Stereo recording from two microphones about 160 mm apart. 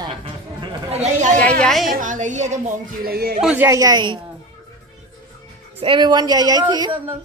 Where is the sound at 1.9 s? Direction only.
55° right (ahead or behind).